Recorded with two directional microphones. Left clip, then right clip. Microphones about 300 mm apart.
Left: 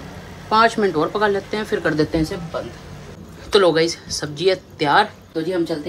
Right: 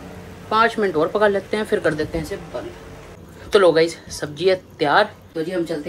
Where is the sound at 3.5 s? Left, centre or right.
Centre.